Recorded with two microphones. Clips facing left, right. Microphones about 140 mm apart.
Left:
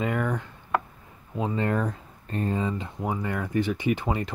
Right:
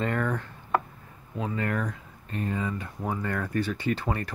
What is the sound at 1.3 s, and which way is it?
Speech, 25° left (ahead or behind).